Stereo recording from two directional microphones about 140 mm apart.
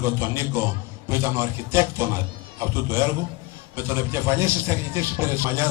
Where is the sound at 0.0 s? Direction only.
20° right (ahead or behind).